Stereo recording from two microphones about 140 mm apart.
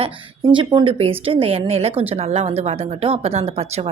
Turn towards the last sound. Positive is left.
turn(degrees=-45)  # may be behind; listen again after turning